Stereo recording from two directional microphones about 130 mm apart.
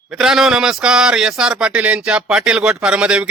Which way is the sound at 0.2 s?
5° right (ahead or behind).